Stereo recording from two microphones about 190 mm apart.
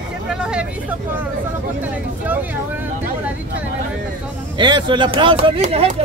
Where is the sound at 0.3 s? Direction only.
5° right (ahead or behind).